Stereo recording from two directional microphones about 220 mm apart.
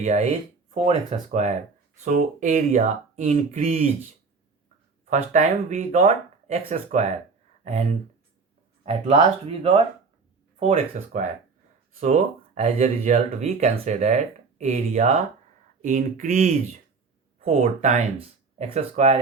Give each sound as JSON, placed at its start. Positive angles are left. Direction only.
{"t": 0.0, "sound": "speech", "side_deg": -30}
{"t": 5.0, "sound": "speech", "side_deg": -35}